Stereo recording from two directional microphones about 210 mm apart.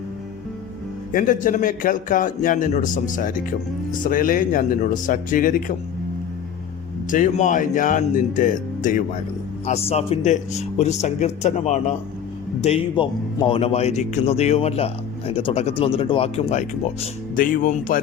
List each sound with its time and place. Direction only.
1.1 s a man's voice: 40° left (ahead or behind)
7.1 s a man's voice: 35° left (ahead or behind)
17.3 s a man's voice: 40° left (ahead or behind)